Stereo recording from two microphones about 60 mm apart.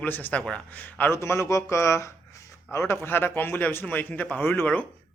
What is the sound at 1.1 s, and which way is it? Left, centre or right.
Speech, left.